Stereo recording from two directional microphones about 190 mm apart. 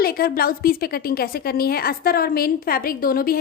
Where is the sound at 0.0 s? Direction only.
55° left (ahead or behind).